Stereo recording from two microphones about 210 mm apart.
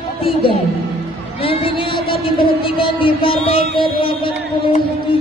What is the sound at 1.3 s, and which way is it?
Music, 25° left (ahead or behind).